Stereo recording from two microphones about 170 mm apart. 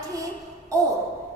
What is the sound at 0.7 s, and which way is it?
Speech, 20° right (ahead or behind).